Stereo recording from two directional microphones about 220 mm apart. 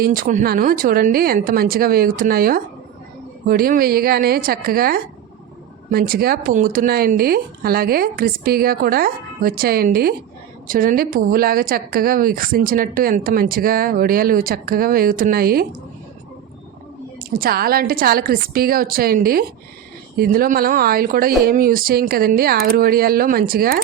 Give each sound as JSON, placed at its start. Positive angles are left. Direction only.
{"t": 0.0, "sound": "a woman's voice", "side_deg": -40}
{"t": 17.2, "sound": "speech", "side_deg": -40}